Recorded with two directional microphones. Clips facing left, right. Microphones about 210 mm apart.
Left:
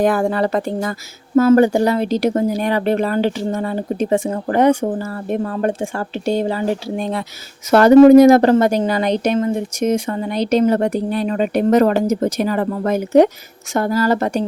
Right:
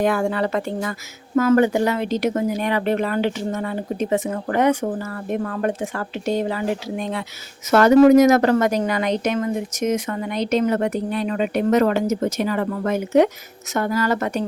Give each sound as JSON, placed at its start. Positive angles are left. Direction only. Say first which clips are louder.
{"t": 0.0, "sound": "a woman's voice", "louder": "left 4 dB", "side_deg": 35}